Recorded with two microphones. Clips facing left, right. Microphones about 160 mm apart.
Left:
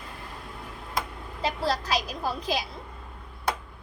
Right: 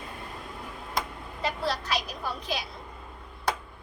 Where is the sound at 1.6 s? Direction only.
35° left (ahead or behind).